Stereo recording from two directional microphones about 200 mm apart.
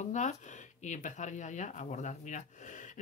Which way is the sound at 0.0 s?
35° left (ahead or behind).